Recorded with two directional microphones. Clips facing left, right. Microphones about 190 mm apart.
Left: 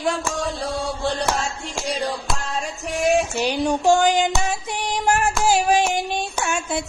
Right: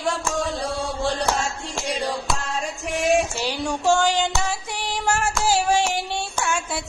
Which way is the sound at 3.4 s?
15° left (ahead or behind).